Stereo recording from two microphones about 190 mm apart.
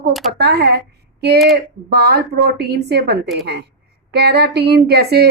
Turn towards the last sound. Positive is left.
turn(degrees=-55)  # may be behind; listen again after turning